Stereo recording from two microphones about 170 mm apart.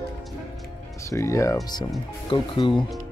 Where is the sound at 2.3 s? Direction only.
30° left (ahead or behind).